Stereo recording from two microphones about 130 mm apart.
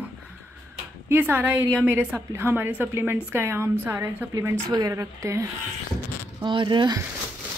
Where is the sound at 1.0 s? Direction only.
15° right (ahead or behind).